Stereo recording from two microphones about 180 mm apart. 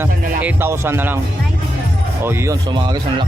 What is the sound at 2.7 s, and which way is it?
Speech, 25° right (ahead or behind).